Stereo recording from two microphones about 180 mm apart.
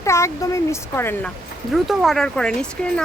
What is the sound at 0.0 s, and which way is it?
Speech, 15° left (ahead or behind).